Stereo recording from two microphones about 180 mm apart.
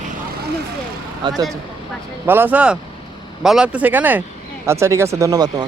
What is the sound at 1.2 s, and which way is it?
Speech, 25° right (ahead or behind).